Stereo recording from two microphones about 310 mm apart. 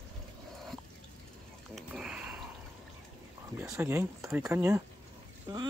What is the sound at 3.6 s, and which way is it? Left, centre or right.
Speech, centre.